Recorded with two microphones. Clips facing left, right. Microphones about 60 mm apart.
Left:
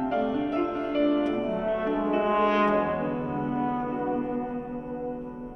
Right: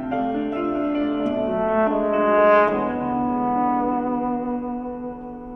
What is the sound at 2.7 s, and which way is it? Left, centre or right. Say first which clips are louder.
Brass instrument: right 3 dB; right.